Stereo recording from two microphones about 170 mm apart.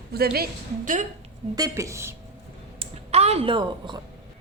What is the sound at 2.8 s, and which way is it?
Speech, 40° right (ahead or behind).